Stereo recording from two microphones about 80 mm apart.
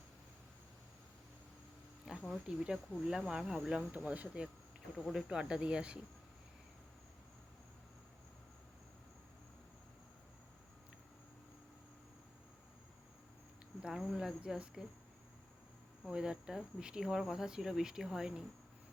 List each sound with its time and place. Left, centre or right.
2.1 s a sound: centre
2.5 s cricket: centre
3.0 s speech: centre
3.8 s cricket: centre
13.8 s speech: centre
16.0 s speech: centre